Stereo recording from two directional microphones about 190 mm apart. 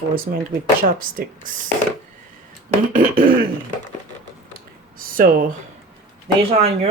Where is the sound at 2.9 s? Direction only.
50° right (ahead or behind).